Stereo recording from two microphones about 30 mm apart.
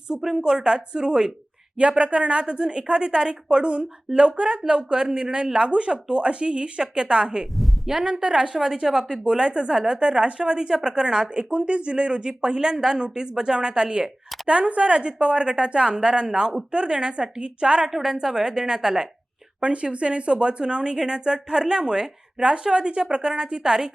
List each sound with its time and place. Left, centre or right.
0.2 s speech: centre
0.4 s speech: right
1.8 s speech: right
2.4 s a woman's voice: right
5.0 s a woman's voice: right
9.2 s a woman's voice: right
11.3 s speech: right
14.4 s a woman's voice: right
17.9 s speech: centre
19.6 s a woman's voice: right
23.2 s speech: right